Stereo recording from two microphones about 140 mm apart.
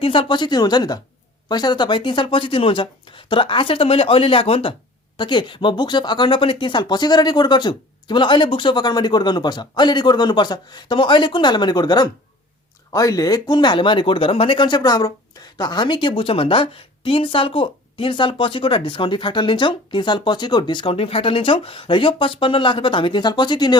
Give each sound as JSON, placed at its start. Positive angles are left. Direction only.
{"t": 0.0, "sound": "speech", "side_deg": 40}